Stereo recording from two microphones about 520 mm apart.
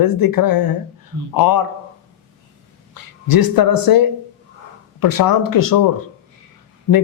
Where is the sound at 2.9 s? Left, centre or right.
Left.